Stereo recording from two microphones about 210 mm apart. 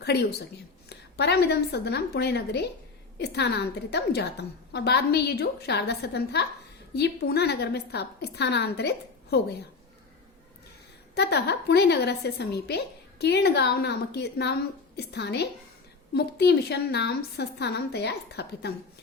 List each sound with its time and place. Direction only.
0.0 s a woman's voice: 50° left (ahead or behind)
11.1 s a woman's voice: 50° left (ahead or behind)